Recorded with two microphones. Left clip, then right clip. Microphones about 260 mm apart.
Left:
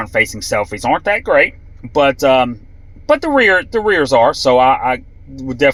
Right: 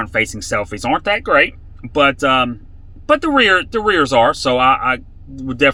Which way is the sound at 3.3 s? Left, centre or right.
Centre.